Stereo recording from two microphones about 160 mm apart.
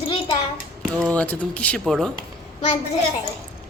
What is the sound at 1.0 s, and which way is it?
A child's voice, 10° left (ahead or behind).